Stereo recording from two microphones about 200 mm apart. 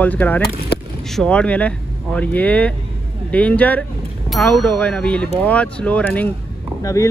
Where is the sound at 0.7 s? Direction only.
55° left (ahead or behind).